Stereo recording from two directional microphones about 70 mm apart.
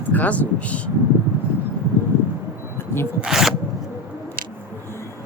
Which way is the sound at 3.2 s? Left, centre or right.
Centre.